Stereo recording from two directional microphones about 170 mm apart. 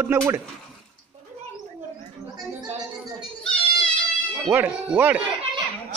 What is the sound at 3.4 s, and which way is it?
Goat, 5° left (ahead or behind).